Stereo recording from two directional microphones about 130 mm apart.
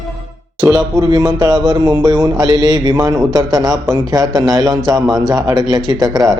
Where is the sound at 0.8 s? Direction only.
30° right (ahead or behind).